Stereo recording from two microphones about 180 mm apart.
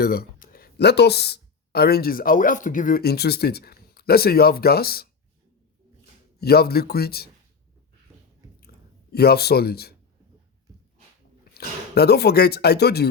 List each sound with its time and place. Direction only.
0.0 s speech: 60° left (ahead or behind)
6.4 s speech: 60° left (ahead or behind)
9.1 s speech: 60° left (ahead or behind)
11.5 s speech: 65° left (ahead or behind)